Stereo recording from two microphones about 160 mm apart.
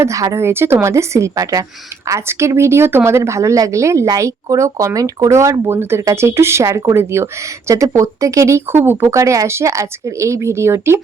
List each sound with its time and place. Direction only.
0.0 s speech: 20° right (ahead or behind)